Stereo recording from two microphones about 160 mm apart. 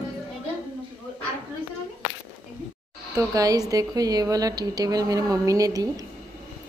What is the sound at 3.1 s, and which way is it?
A woman's voice, 20° right (ahead or behind).